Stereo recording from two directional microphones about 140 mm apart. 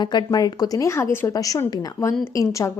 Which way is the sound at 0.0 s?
30° left (ahead or behind).